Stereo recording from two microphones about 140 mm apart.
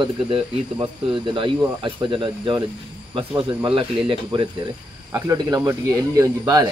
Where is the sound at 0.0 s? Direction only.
35° right (ahead or behind).